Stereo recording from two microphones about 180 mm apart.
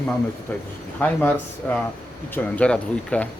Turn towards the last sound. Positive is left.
turn(degrees=5)  # may be behind; listen again after turning